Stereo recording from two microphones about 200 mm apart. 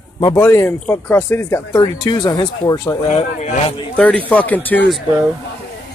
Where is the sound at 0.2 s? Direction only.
15° left (ahead or behind).